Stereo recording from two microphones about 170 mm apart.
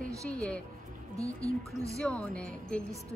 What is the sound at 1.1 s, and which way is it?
Speech, 20° right (ahead or behind).